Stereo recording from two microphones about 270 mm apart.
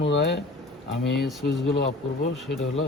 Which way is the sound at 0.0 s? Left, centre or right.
Left.